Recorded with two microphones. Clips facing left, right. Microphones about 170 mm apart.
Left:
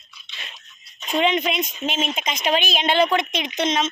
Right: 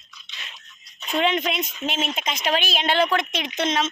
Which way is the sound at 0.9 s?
15° left (ahead or behind).